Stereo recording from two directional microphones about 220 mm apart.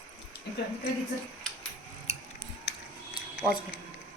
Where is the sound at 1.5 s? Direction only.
Centre (ahead or behind).